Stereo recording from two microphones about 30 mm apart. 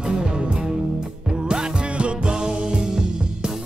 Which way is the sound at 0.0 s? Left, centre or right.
Right.